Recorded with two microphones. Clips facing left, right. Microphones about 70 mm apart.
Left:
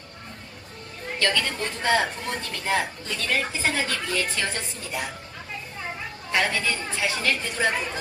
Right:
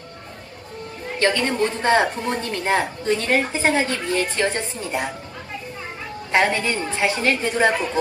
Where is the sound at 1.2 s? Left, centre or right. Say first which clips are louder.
Right 6 dB; right.